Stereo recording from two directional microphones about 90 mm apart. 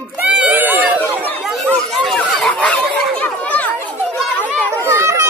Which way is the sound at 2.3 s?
15° left (ahead or behind).